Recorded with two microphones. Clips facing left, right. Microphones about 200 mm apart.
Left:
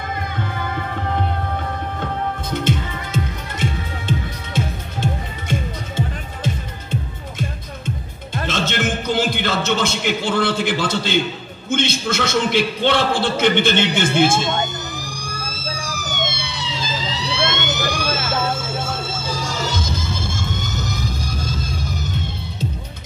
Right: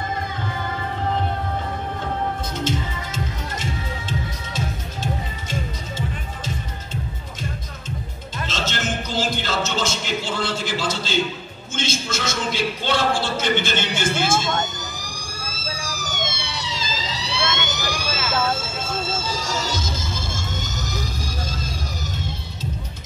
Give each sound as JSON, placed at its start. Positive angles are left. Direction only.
{"t": 2.6, "sound": "music", "side_deg": 60}
{"t": 11.7, "sound": "a man's voice", "side_deg": 60}
{"t": 16.2, "sound": "emergency vehicle", "side_deg": 60}
{"t": 19.2, "sound": "music", "side_deg": 55}